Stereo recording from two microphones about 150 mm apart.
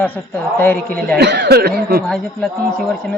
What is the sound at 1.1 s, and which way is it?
Speech, 90° right.